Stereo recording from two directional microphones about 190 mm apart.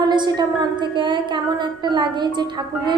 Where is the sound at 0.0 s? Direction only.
20° right (ahead or behind).